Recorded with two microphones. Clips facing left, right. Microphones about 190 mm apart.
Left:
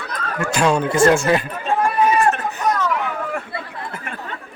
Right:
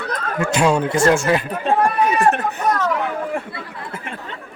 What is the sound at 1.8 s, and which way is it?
Run, 60° right (ahead or behind).